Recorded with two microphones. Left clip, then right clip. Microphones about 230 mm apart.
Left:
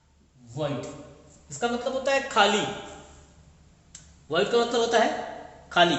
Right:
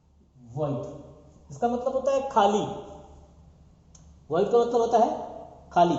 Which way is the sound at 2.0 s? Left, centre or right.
Left.